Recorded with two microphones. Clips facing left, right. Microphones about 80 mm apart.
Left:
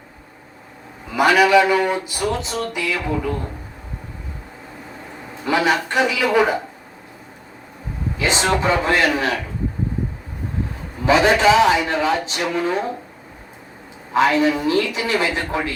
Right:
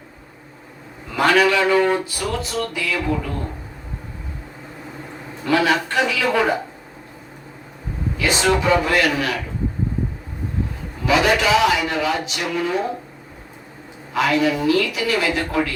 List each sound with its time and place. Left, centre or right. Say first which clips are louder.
1.1 s speech: left 3 dB; centre
5.5 s speech: even; centre
8.2 s a man's voice: right 1 dB; left
11.0 s a man's voice: left 3 dB; left
14.1 s a man's voice: left 2 dB; left